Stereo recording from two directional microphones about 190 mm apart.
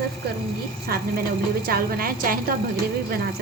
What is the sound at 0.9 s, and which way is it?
A woman's voice, 55° right (ahead or behind).